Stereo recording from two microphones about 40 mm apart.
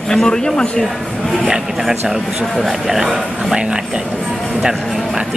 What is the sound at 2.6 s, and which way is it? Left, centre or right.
A man's voice, centre.